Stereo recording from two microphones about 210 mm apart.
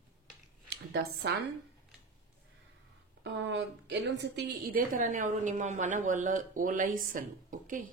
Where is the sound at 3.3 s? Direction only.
55° right (ahead or behind).